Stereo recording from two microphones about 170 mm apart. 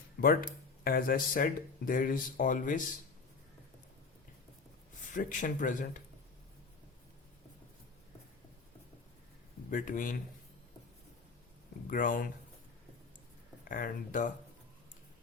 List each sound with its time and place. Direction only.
0.2 s speech: 60° left (ahead or behind)
5.1 s speech: 50° left (ahead or behind)
9.6 s speech: 50° left (ahead or behind)
11.9 s speech: 50° left (ahead or behind)
13.7 s speech: 55° left (ahead or behind)